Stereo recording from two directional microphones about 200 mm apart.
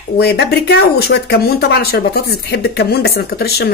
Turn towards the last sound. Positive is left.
turn(degrees=50)  # may be behind; listen again after turning